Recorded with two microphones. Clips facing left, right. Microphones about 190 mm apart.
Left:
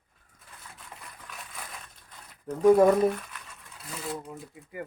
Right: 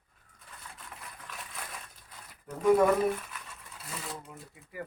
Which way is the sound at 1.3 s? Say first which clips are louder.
Left 1 dB; centre (ahead or behind).